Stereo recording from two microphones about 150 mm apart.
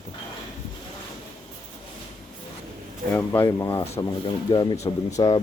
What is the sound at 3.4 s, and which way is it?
Speech, 20° left (ahead or behind).